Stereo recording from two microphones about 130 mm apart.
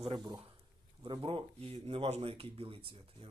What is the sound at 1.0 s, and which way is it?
Speech, 40° right (ahead or behind).